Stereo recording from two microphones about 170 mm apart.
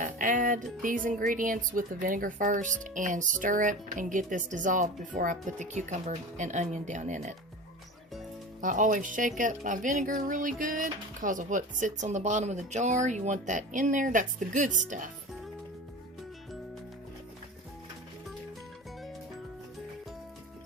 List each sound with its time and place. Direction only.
0.0 s speech: 50° right (ahead or behind)
8.6 s speech: 50° right (ahead or behind)